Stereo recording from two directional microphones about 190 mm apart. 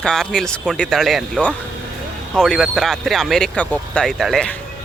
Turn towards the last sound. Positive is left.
turn(degrees=5)  # may be behind; listen again after turning